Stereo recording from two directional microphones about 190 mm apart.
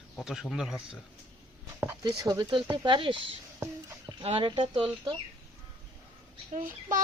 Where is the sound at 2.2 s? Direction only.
20° right (ahead or behind).